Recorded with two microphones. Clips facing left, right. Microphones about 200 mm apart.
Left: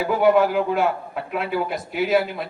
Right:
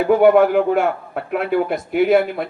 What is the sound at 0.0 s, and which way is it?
Speech, 60° right (ahead or behind).